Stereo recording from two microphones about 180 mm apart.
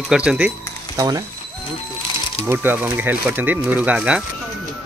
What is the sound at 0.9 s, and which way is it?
Speech, 20° right (ahead or behind).